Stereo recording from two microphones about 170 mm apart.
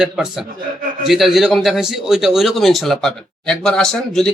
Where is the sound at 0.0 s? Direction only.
5° right (ahead or behind).